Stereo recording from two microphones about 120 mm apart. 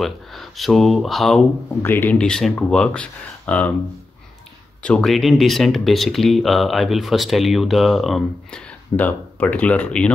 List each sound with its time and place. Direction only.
0.0 s speech: centre (ahead or behind)
1.8 s speech: 20° left (ahead or behind)
2.1 s speech: 5° left (ahead or behind)
4.8 s speech: 5° left (ahead or behind)